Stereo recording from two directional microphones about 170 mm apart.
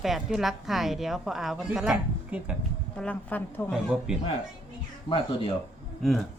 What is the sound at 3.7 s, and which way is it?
Speech, 5° right (ahead or behind).